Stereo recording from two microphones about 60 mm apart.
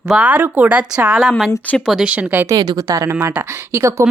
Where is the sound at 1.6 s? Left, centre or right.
Left.